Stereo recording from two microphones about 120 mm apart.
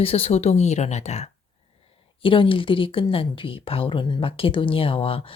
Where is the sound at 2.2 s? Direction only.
45° left (ahead or behind).